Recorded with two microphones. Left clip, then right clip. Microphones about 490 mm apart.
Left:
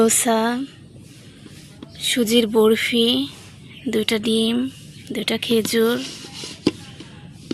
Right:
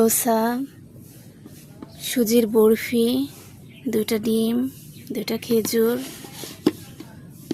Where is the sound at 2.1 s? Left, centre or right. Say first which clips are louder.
Left 1 dB; right.